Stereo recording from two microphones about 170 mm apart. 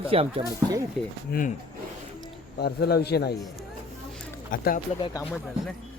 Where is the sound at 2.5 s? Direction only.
70° left (ahead or behind).